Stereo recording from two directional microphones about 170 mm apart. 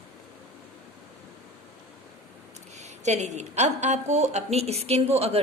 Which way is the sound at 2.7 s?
40° right (ahead or behind).